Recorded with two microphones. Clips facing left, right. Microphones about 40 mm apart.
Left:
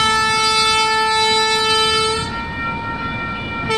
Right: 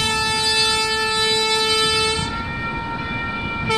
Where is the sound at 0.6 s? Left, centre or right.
Left.